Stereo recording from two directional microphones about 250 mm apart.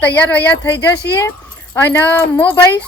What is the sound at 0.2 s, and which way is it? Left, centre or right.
Speech, centre.